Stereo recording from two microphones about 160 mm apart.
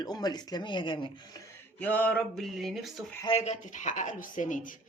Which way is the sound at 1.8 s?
10° left (ahead or behind).